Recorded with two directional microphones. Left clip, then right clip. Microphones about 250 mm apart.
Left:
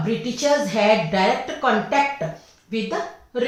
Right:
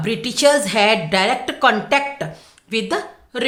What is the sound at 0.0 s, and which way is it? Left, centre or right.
A woman's voice, right.